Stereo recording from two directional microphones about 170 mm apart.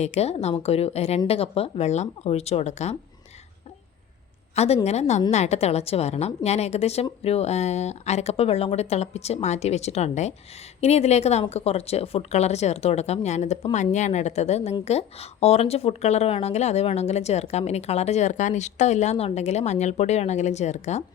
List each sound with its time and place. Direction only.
0.0 s speech: 40° left (ahead or behind)
4.5 s speech: 40° left (ahead or behind)